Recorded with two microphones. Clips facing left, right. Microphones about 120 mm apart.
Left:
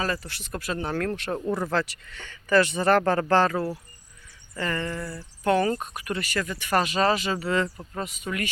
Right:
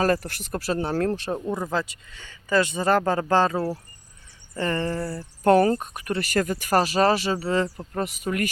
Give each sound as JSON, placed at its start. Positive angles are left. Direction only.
{"t": 0.0, "sound": "speech", "side_deg": -50}
{"t": 1.4, "sound": "speech", "side_deg": -15}
{"t": 7.9, "sound": "speech", "side_deg": -45}